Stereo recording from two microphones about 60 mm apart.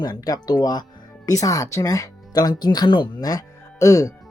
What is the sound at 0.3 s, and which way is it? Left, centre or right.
Speech, left.